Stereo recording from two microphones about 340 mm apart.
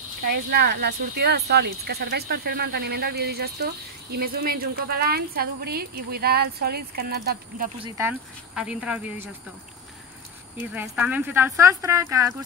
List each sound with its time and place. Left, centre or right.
0.3 s speech: right
7.8 s speech: centre
10.7 s speech: centre